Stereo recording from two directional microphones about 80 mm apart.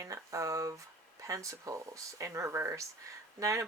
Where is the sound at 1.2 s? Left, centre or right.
Right.